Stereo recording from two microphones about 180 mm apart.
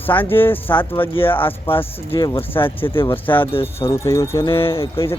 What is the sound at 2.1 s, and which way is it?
Speech, 25° left (ahead or behind).